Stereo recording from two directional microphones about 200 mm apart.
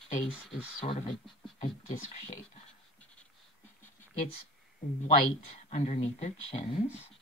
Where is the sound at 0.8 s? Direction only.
25° left (ahead or behind).